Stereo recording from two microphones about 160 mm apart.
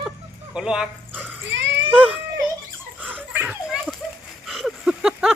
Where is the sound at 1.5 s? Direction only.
90° right.